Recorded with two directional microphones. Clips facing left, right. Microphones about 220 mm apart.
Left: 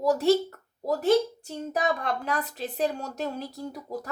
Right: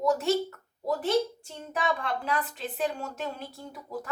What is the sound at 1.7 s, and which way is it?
A woman's voice, 40° left (ahead or behind).